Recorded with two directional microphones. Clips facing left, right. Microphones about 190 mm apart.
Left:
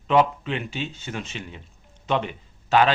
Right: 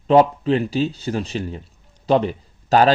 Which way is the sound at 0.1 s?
35° right (ahead or behind).